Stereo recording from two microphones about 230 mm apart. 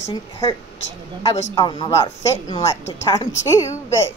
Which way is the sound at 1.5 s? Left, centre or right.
Centre.